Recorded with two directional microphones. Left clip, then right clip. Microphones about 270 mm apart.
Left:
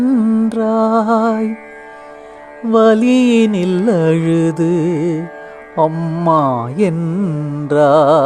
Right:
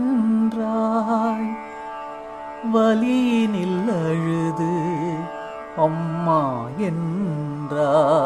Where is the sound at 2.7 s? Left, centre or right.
Left.